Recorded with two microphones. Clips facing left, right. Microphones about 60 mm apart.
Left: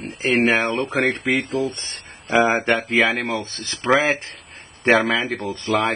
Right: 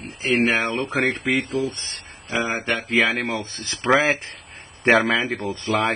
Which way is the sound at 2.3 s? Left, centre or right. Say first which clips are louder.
Left 7 dB; left.